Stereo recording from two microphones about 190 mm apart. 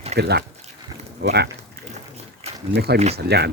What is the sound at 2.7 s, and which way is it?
Speech, 55° right (ahead or behind).